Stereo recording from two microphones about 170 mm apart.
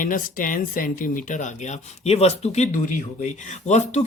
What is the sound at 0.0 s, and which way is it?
Speech, 55° left (ahead or behind).